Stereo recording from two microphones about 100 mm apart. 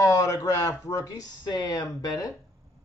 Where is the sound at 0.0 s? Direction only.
35° left (ahead or behind).